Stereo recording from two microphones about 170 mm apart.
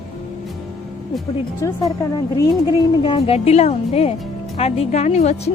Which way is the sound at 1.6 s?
20° left (ahead or behind).